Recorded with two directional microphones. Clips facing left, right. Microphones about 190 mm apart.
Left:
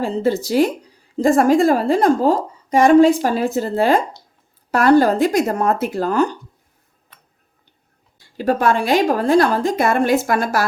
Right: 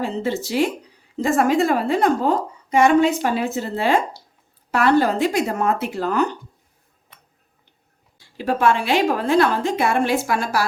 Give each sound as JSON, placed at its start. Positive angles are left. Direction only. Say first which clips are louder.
{"t": 0.0, "sound": "a woman's voice", "louder": "left 5 dB", "side_deg": 35}
{"t": 8.4, "sound": "a woman's voice", "louder": "left 2 dB", "side_deg": 40}